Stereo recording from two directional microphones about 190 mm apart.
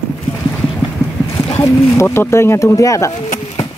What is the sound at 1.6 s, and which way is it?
Speech, 10° left (ahead or behind).